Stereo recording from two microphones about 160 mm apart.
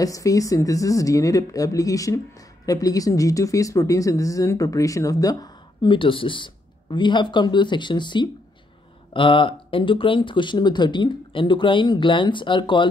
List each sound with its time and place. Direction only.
0.0 s speech: 20° left (ahead or behind)